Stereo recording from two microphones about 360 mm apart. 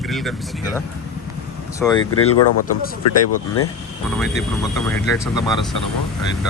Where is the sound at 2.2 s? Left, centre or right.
Left.